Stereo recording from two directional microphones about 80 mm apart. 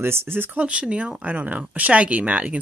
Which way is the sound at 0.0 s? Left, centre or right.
Right.